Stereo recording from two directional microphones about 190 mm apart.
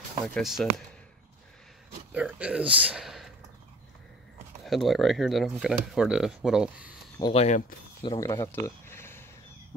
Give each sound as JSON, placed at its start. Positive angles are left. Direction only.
{"t": 0.2, "sound": "speech", "side_deg": 0}
{"t": 2.1, "sound": "speech", "side_deg": -5}
{"t": 4.6, "sound": "speech", "side_deg": 0}
{"t": 7.3, "sound": "speech", "side_deg": 35}
{"t": 8.0, "sound": "speech", "side_deg": 20}